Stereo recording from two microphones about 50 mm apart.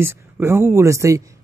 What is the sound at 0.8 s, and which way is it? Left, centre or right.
Speech, right.